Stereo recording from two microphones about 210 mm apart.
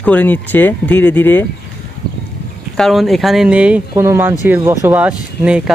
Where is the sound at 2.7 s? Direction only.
Centre (ahead or behind).